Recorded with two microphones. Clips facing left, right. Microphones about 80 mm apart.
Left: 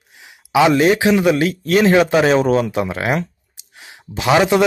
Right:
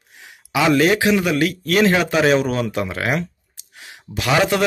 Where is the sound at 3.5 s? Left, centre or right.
Left.